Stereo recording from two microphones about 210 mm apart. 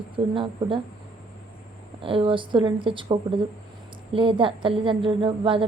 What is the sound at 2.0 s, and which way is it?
A woman's voice, 25° right (ahead or behind).